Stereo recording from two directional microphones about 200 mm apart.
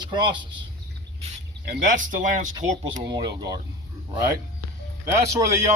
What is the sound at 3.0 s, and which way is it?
Speech, 20° right (ahead or behind).